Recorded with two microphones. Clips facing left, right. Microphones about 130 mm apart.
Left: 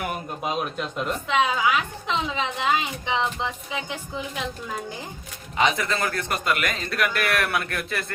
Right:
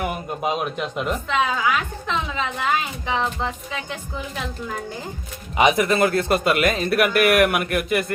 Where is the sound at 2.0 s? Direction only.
20° left (ahead or behind).